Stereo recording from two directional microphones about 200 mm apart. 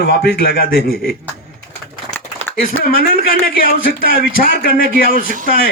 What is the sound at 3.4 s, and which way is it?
Speech, 45° left (ahead or behind).